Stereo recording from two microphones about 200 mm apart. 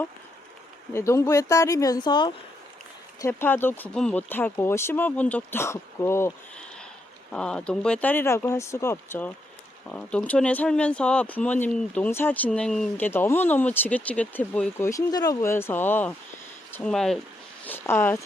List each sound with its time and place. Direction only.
0.9 s speech: 15° left (ahead or behind)
3.2 s speech: 10° left (ahead or behind)